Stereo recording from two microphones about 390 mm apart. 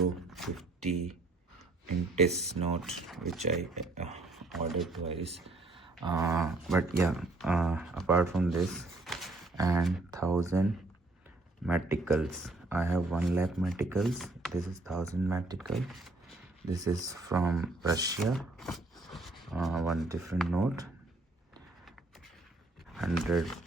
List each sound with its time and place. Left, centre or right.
0.3 s a sound: centre
2.5 s speech: centre
2.8 s speech: centre
3.4 s speech: centre
4.3 s speech: centre
5.0 s speech: centre
23.0 s speech: centre